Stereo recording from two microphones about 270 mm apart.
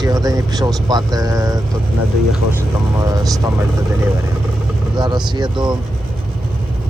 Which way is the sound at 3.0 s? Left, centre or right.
Centre.